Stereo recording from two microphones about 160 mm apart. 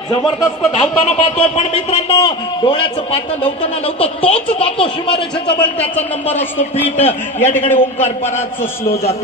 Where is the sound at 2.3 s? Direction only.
30° left (ahead or behind).